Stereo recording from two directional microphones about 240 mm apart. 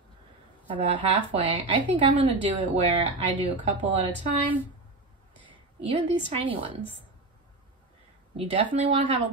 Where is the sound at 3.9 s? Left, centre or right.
Right.